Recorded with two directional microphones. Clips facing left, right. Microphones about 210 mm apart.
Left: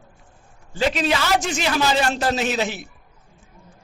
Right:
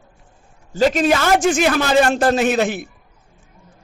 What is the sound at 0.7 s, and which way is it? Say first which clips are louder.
A man's voice: right 6 dB; 45° right (ahead or behind).